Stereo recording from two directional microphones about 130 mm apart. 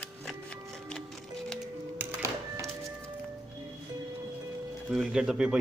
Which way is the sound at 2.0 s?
25° right (ahead or behind).